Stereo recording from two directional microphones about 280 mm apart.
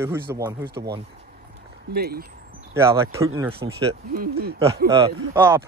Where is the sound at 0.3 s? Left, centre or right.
Centre.